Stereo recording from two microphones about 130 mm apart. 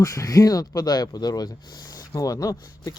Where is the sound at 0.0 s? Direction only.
25° left (ahead or behind).